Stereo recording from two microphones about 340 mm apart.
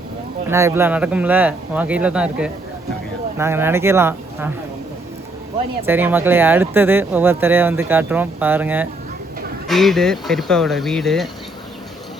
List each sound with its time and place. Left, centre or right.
0.4 s speech: centre
5.8 s speech: centre